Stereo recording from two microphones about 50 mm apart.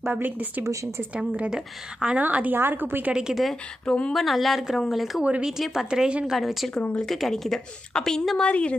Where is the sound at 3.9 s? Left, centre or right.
Left.